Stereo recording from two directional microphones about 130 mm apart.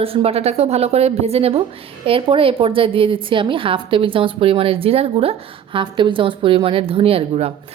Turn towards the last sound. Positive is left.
turn(degrees=-50)  # may be behind; listen again after turning